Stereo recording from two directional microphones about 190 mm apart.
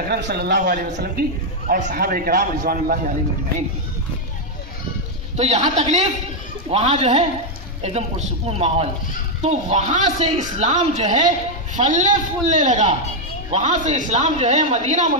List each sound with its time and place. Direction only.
0.1 s a man's voice: 55° right (ahead or behind)
5.3 s a man's voice: 35° right (ahead or behind)